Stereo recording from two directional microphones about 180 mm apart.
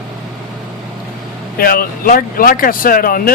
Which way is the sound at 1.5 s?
55° left (ahead or behind).